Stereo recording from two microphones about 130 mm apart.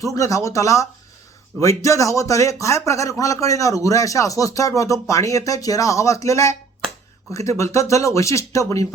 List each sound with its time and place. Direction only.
0.0 s speech: 25° left (ahead or behind)